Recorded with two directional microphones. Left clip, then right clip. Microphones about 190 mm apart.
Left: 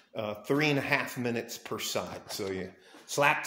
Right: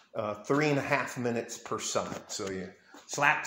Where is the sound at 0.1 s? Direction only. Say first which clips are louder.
Right 1 dB; 5° left (ahead or behind).